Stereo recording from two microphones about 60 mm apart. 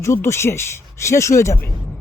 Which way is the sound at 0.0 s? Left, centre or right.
Left.